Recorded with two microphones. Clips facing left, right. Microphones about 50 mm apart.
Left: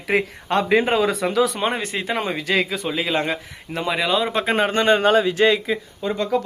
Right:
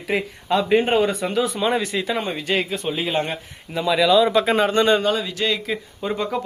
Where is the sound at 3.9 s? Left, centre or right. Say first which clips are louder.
Right 5 dB; left.